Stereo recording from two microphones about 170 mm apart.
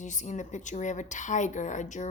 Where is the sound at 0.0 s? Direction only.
45° left (ahead or behind).